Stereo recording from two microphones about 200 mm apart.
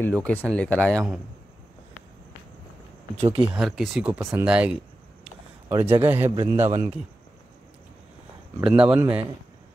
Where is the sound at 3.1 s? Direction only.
30° right (ahead or behind).